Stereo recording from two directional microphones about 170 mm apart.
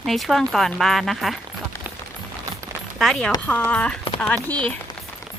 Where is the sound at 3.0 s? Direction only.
Centre (ahead or behind).